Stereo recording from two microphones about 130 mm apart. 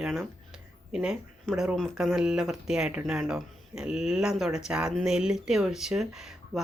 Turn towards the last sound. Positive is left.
turn(degrees=-5)  # may be behind; listen again after turning